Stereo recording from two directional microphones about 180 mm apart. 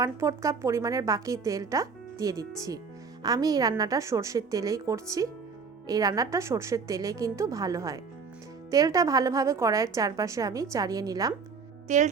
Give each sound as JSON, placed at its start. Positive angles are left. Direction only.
{"t": 0.0, "sound": "a woman's voice", "side_deg": -15}
{"t": 11.9, "sound": "a woman's voice", "side_deg": -40}